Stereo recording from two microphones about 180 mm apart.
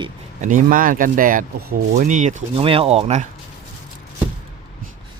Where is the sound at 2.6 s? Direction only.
30° right (ahead or behind).